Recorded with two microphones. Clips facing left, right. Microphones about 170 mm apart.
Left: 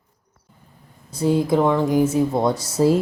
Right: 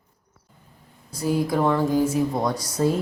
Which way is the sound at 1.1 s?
25° left (ahead or behind).